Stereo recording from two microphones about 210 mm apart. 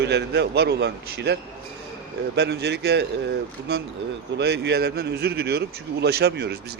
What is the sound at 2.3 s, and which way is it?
Speech, 50° right (ahead or behind).